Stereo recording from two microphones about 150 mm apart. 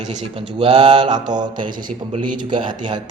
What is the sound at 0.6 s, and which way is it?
Speech, 35° right (ahead or behind).